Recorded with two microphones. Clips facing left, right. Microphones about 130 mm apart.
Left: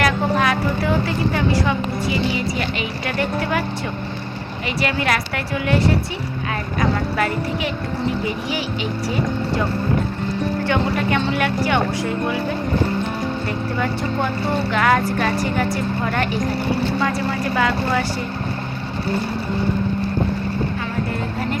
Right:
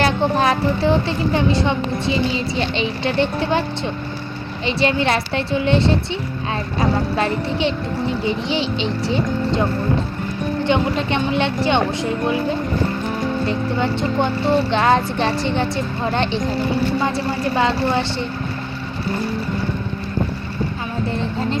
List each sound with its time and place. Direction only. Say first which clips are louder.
0.0 s a woman's voice: right 2 dB; 30° right (ahead or behind)
4.8 s a woman's voice: right 3 dB; 25° right (ahead or behind)
7.2 s a woman's voice: right 2 dB; 25° right (ahead or behind)
10.7 s a woman's voice: right 2 dB; 25° right (ahead or behind)